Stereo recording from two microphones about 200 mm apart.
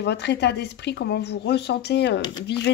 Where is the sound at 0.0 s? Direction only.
55° left (ahead or behind).